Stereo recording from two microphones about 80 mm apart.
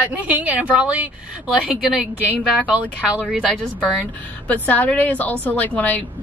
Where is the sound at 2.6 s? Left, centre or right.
Centre.